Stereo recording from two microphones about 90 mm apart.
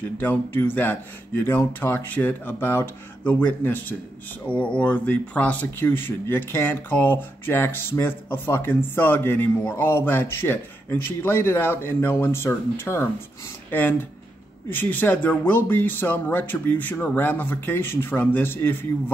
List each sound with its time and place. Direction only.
0.2 s speech: 20° left (ahead or behind)